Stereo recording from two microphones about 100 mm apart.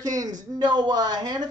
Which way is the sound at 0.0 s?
40° right (ahead or behind).